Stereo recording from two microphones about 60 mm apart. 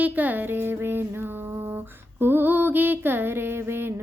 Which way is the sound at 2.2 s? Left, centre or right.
Right.